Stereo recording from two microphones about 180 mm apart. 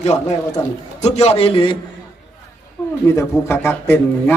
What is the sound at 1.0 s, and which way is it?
Speech, 35° left (ahead or behind).